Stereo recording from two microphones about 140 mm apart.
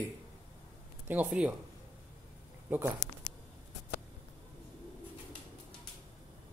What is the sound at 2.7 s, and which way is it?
Speech, 15° right (ahead or behind).